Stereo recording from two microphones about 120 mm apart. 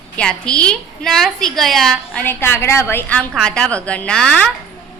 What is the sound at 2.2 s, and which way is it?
A woman's voice, 15° left (ahead or behind).